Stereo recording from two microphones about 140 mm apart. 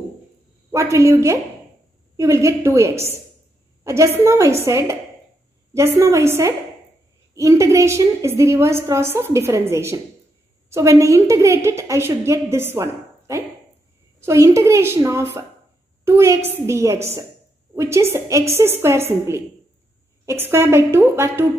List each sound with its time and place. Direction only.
0.7 s a woman's voice: 20° right (ahead or behind)